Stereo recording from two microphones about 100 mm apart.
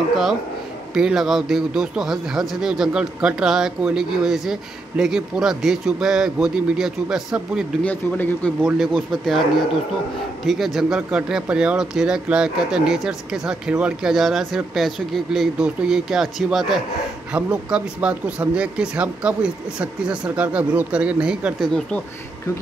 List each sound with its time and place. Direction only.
0.9 s speech: 5° right (ahead or behind)
7.8 s speech: 15° left (ahead or behind)
8.7 s speech: centre (ahead or behind)
10.4 s speech: centre (ahead or behind)
21.5 s speech: 5° left (ahead or behind)